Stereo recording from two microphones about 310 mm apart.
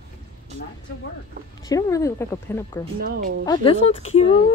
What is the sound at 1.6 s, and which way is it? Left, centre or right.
A woman's voice, centre.